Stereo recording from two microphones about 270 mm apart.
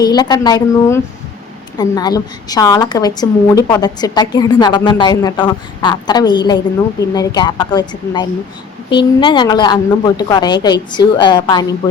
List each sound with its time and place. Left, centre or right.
0.0 s a woman's voice: centre